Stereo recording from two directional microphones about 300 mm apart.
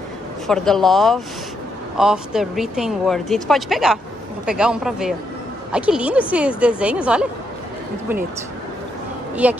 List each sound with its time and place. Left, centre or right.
0.5 s speech: centre
9.3 s speech: centre